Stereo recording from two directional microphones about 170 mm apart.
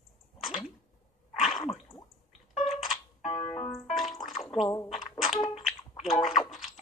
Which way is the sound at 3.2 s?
35° left (ahead or behind).